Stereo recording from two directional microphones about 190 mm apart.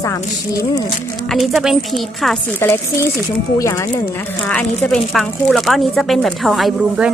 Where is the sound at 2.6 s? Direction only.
15° left (ahead or behind).